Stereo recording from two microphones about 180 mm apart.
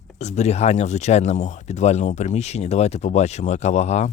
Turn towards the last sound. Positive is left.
turn(degrees=40)  # may be behind; listen again after turning